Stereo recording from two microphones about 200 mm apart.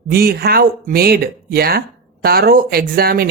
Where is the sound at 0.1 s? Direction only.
50° right (ahead or behind).